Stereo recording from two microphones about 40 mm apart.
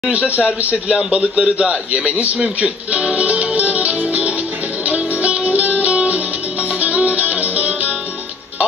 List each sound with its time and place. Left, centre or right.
0.1 s speech: right
2.1 s a man's voice: right
2.4 s speech: right
3.2 s music: right